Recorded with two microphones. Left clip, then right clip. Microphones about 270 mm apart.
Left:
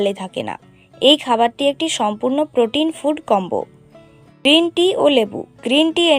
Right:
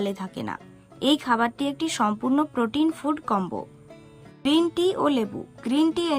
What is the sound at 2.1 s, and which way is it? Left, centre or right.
Speech, right.